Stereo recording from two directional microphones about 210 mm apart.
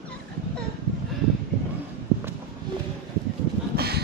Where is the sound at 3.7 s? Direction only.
50° right (ahead or behind).